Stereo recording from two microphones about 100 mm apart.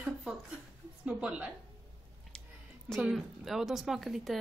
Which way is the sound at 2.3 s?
10° left (ahead or behind).